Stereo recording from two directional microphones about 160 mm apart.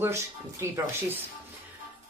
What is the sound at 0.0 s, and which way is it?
A woman's voice, 15° right (ahead or behind).